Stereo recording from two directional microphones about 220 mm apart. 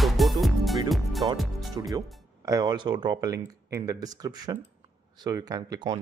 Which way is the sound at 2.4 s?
15° right (ahead or behind).